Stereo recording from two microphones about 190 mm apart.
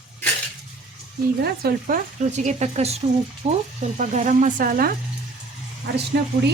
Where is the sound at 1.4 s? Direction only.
50° right (ahead or behind).